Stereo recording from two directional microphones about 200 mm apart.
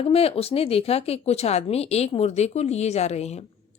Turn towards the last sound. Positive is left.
turn(degrees=35)  # may be behind; listen again after turning